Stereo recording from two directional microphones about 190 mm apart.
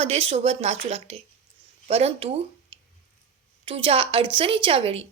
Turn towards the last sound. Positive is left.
turn(degrees=-30)  # may be behind; listen again after turning